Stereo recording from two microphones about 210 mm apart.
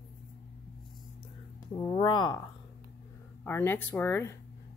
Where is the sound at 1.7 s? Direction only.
20° left (ahead or behind).